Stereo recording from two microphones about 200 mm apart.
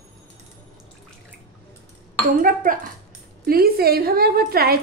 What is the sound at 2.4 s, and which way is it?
A woman's voice, 45° right (ahead or behind).